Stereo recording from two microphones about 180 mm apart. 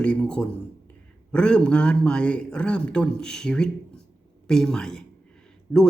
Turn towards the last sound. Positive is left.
turn(degrees=10)  # may be behind; listen again after turning